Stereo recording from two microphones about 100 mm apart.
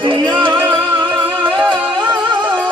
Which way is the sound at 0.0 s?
55° right (ahead or behind).